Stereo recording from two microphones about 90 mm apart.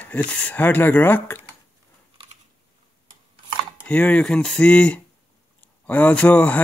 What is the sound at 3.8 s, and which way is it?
A man's voice, 15° left (ahead or behind).